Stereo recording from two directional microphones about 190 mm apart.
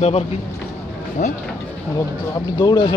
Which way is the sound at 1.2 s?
40° left (ahead or behind).